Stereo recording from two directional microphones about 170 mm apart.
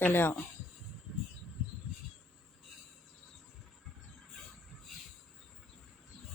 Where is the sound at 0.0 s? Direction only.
15° left (ahead or behind).